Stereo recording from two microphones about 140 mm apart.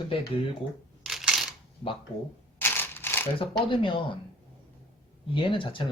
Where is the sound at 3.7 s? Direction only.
35° left (ahead or behind).